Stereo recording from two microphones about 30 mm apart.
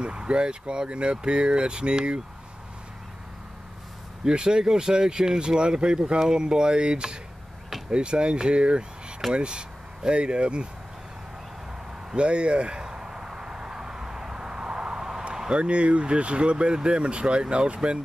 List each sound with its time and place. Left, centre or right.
0.0 s speech: right
4.2 s speech: right
12.2 s speech: right
12.8 s vehicle: right
15.3 s speech: right